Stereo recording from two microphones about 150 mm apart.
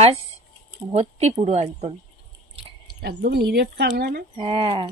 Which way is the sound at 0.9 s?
45° right (ahead or behind).